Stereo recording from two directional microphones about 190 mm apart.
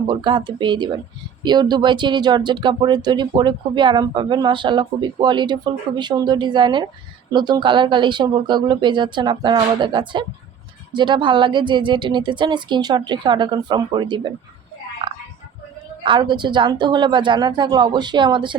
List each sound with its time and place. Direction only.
0.1 s speech: 25° right (ahead or behind)
15.0 s a sound: 25° right (ahead or behind)
16.0 s speech: 25° right (ahead or behind)